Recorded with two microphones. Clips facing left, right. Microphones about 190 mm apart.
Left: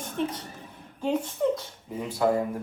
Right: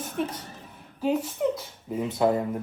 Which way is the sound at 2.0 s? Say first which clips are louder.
Right 1 dB; 20° right (ahead or behind).